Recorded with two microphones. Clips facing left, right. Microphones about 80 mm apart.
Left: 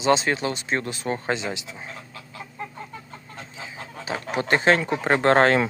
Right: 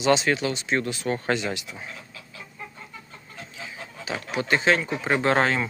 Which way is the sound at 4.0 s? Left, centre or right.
Left.